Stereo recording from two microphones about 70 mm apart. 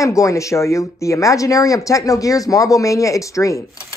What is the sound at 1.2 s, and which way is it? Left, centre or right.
Speech, left.